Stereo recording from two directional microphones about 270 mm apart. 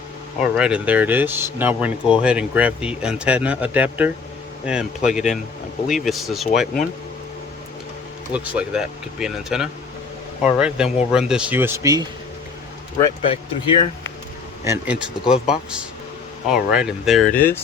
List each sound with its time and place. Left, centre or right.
0.5 s speech: centre
8.3 s speech: centre
13.0 s speech: left
14.6 s speech: centre